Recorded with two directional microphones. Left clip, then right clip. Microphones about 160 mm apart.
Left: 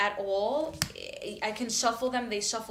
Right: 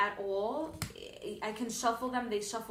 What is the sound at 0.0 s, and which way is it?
Speech, 20° left (ahead or behind).